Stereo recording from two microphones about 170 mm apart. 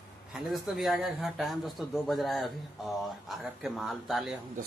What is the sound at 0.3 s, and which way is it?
Speech, centre (ahead or behind).